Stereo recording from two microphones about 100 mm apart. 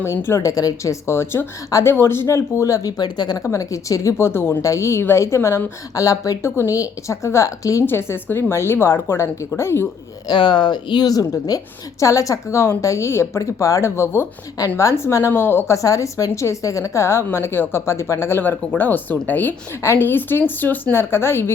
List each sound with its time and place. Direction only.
0.0 s a woman's voice: 25° left (ahead or behind)
3.0 s speech: 45° left (ahead or behind)
3.4 s a woman's voice: 30° left (ahead or behind)
10.2 s a woman's voice: 50° left (ahead or behind); by 21.5 s 25° left (ahead or behind)